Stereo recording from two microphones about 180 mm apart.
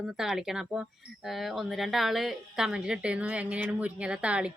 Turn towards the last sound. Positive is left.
turn(degrees=-5)  # may be behind; listen again after turning